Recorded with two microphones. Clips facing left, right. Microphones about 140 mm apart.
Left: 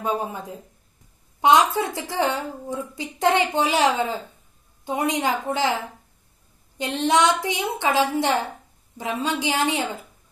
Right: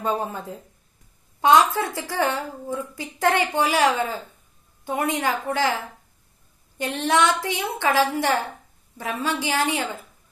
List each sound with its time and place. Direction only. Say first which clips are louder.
0.0 s a woman's voice: even; 15° left (ahead or behind)